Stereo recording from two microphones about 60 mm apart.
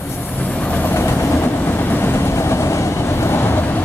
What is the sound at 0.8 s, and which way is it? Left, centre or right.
Train, left.